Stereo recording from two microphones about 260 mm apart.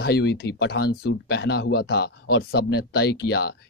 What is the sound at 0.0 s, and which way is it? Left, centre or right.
Speech, left.